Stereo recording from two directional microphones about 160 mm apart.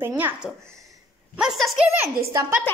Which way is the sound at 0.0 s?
15° right (ahead or behind).